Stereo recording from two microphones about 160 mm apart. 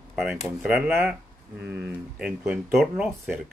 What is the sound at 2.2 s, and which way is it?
Speech, 5° right (ahead or behind).